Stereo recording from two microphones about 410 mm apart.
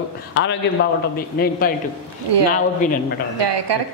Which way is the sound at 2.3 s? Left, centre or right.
Right.